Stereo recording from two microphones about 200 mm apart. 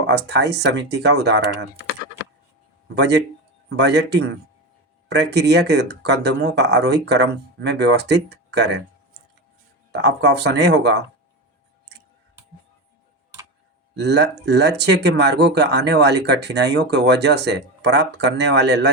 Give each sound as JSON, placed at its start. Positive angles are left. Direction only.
{"t": 0.1, "sound": "speech", "side_deg": -60}
{"t": 2.9, "sound": "speech", "side_deg": -60}
{"t": 9.9, "sound": "speech", "side_deg": -60}
{"t": 13.9, "sound": "speech", "side_deg": -55}